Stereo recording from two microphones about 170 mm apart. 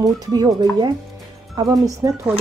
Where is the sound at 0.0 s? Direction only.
25° right (ahead or behind).